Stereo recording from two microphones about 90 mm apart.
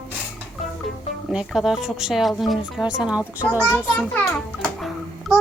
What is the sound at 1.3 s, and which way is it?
Speech, 5° right (ahead or behind).